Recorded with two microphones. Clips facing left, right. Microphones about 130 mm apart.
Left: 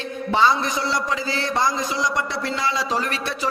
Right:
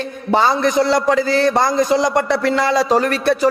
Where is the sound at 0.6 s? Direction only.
60° right (ahead or behind).